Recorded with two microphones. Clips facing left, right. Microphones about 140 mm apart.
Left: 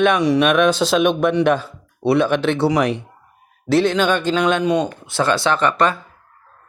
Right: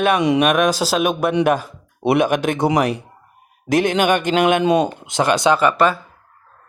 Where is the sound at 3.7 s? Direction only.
50° right (ahead or behind).